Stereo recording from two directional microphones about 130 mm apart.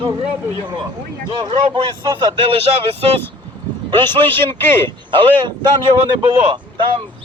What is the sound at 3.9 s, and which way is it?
A man's voice, 35° right (ahead or behind).